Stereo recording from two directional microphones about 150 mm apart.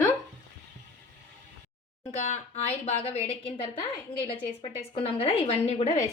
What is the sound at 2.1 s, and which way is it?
A woman's voice, 50° left (ahead or behind).